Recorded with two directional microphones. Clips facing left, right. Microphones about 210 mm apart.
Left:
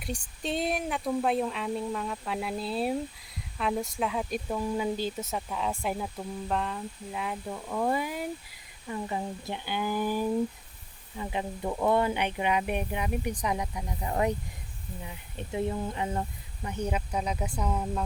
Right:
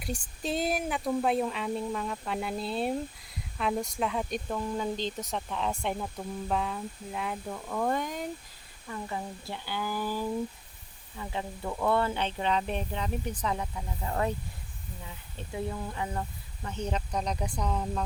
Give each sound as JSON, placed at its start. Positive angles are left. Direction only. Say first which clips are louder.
{"t": 0.0, "sound": "speech", "louder": "even", "side_deg": 0}
{"t": 8.9, "sound": "speech", "louder": "left 3 dB", "side_deg": 20}
{"t": 16.6, "sound": "speech", "louder": "left 2 dB", "side_deg": 10}